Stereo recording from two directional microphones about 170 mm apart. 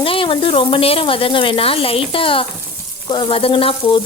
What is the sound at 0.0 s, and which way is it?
Speech, 30° left (ahead or behind).